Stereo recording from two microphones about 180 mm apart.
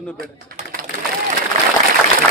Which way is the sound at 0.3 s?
55° right (ahead or behind).